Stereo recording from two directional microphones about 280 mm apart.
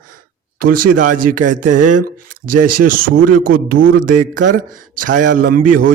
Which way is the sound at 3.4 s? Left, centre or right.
Right.